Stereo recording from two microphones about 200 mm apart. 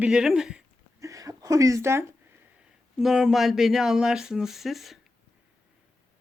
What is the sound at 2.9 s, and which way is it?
Speech, centre (ahead or behind).